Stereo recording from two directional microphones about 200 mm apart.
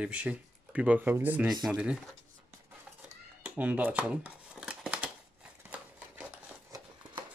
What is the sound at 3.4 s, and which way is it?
Shuffling cards, 10° right (ahead or behind).